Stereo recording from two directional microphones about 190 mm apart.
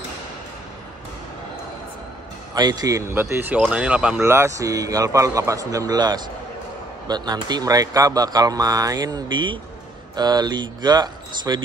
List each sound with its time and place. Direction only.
2.5 s speech: 20° right (ahead or behind)